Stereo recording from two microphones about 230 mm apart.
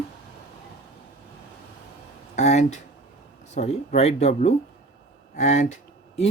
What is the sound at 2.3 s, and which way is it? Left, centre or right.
Speech, left.